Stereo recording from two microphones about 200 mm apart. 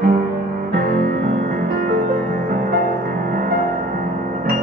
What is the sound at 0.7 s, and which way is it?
Music, 50° right (ahead or behind).